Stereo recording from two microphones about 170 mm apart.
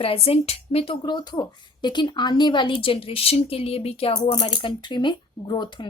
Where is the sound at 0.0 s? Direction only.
35° left (ahead or behind).